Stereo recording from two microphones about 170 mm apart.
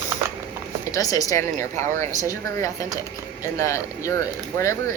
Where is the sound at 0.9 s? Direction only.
20° left (ahead or behind).